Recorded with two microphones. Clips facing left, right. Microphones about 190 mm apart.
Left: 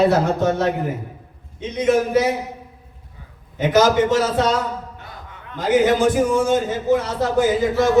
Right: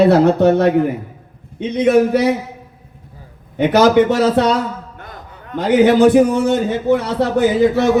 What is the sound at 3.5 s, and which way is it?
Speech, 65° right (ahead or behind).